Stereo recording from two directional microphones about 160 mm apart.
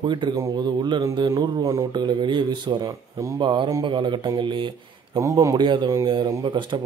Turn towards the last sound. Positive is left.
turn(degrees=-30)  # may be behind; listen again after turning